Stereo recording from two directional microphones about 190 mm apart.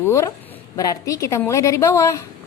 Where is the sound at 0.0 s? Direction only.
15° left (ahead or behind).